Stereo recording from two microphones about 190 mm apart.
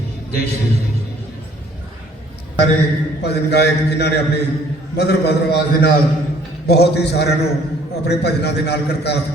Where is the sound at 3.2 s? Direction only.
60° left (ahead or behind).